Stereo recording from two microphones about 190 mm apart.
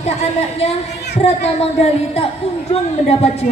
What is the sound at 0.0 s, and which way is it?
Music, 35° left (ahead or behind).